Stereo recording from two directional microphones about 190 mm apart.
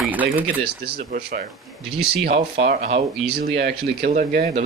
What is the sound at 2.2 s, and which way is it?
Speech, 50° right (ahead or behind).